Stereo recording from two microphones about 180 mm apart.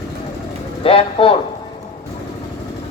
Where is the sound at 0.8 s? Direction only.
30° left (ahead or behind).